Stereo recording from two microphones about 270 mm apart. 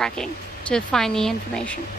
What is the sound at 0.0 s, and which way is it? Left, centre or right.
Speech, centre.